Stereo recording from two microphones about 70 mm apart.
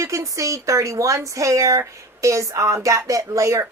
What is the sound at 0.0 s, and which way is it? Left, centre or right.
Speech, right.